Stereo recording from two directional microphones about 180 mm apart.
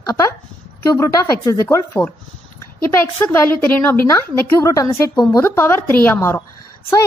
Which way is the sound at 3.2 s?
10° left (ahead or behind).